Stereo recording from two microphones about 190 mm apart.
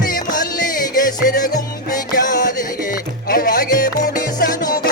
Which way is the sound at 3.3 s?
45° left (ahead or behind).